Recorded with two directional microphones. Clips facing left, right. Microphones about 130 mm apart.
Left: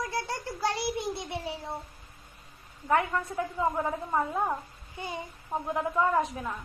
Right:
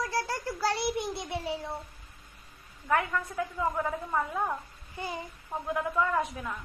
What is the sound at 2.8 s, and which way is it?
A woman's voice, 30° left (ahead or behind).